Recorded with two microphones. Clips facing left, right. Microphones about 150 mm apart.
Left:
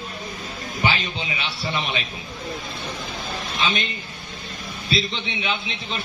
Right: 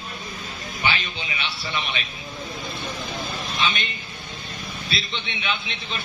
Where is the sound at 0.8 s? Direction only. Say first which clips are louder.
Left 3 dB; 35° left (ahead or behind).